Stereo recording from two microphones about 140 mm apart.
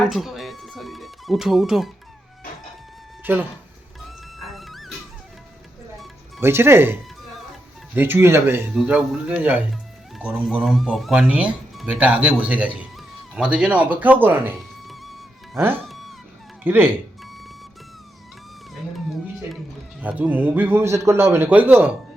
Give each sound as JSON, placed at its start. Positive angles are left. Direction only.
{"t": 0.0, "sound": "music", "side_deg": 0}
{"t": 3.3, "sound": "a man's voice", "side_deg": -15}
{"t": 4.4, "sound": "music", "side_deg": 0}
{"t": 6.4, "sound": "a man's voice", "side_deg": -15}
{"t": 7.9, "sound": "a man's voice", "side_deg": -15}
{"t": 8.7, "sound": "a man's voice", "side_deg": -5}
{"t": 14.8, "sound": "music", "side_deg": 0}
{"t": 15.5, "sound": "a man's voice", "side_deg": -15}
{"t": 15.8, "sound": "a sound", "side_deg": 0}
{"t": 16.6, "sound": "a man's voice", "side_deg": -15}
{"t": 17.2, "sound": "music", "side_deg": 0}
{"t": 20.0, "sound": "a man's voice", "side_deg": -10}